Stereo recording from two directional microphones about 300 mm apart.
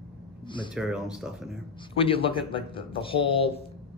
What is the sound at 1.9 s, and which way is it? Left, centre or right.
Speech, centre.